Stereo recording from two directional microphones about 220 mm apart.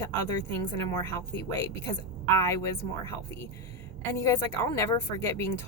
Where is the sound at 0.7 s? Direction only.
15° left (ahead or behind).